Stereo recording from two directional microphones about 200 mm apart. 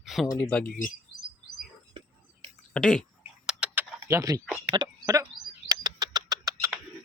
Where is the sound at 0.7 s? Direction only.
40° left (ahead or behind).